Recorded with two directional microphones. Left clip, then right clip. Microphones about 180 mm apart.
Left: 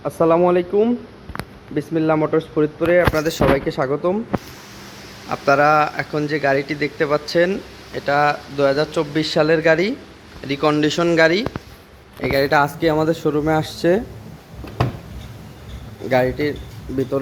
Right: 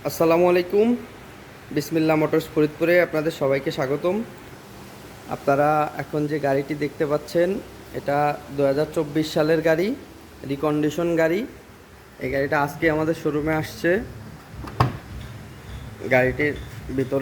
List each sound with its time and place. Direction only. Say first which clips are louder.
0.0 s speech: left 3 dB; 10° right (ahead or behind)
3.2 s speech: left 5 dB; centre (ahead or behind)
5.3 s speech: left 5 dB; centre (ahead or behind)
12.2 s speech: left 6 dB; 25° left (ahead or behind)
16.0 s speech: left 1 dB; 20° left (ahead or behind)